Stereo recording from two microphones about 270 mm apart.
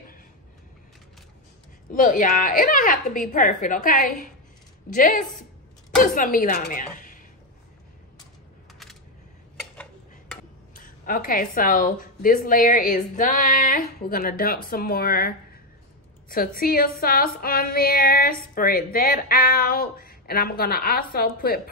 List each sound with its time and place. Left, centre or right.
1.9 s a woman's voice: left
9.6 s dishes: centre
10.7 s a woman's voice: left